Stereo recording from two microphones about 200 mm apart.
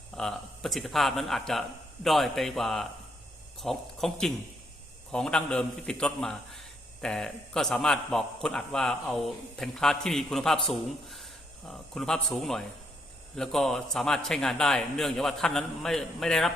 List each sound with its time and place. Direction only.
0.2 s a man's voice: centre (ahead or behind)